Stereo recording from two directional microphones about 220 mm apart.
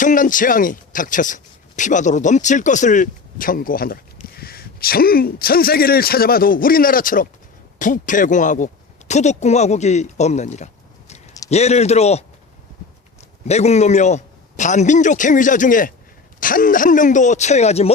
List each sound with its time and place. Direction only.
0.0 s a man's voice: 35° left (ahead or behind)
13.5 s speech: 30° left (ahead or behind)